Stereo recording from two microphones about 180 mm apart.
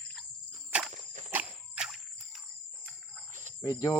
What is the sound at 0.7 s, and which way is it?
Walk, 5° right (ahead or behind).